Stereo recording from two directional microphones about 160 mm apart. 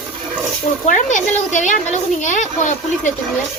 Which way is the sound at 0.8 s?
50° left (ahead or behind).